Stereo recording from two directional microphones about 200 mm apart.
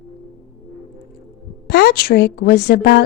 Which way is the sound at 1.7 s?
50° left (ahead or behind).